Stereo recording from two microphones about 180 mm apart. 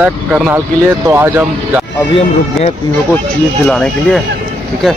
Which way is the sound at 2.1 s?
35° left (ahead or behind).